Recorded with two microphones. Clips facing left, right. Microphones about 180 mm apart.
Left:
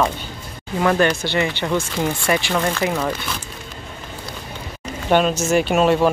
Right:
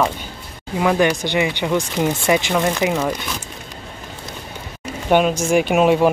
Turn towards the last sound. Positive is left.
turn(degrees=-10)  # may be behind; listen again after turning